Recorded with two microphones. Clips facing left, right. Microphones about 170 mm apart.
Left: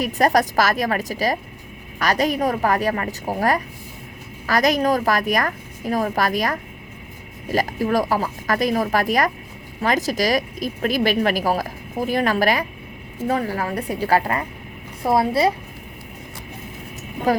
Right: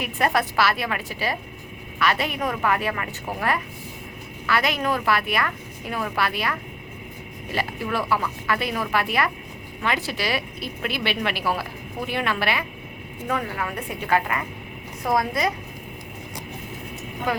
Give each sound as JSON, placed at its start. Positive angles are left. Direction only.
{"t": 0.0, "sound": "a woman's voice", "side_deg": 40}
{"t": 17.3, "sound": "a woman's voice", "side_deg": 35}